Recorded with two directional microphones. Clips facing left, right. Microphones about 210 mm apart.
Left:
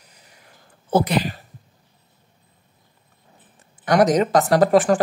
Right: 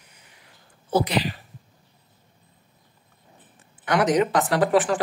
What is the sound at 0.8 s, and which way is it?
Speech, 50° left (ahead or behind).